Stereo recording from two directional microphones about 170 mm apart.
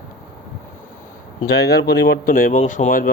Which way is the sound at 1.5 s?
75° left (ahead or behind).